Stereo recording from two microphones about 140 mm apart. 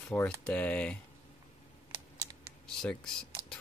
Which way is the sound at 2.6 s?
5° left (ahead or behind).